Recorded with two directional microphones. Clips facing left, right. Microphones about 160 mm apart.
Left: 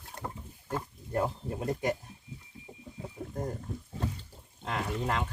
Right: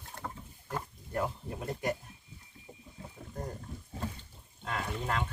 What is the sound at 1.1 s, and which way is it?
Speech, 25° left (ahead or behind).